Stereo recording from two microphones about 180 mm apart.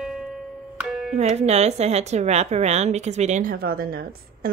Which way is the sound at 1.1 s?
35° right (ahead or behind).